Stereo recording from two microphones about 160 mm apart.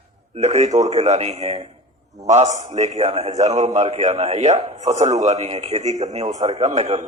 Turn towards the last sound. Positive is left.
turn(degrees=-45)  # may be behind; listen again after turning